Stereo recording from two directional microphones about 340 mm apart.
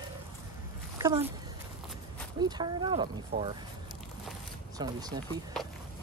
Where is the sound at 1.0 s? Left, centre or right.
Centre.